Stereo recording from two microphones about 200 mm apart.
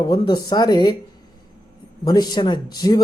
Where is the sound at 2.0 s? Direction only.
20° left (ahead or behind).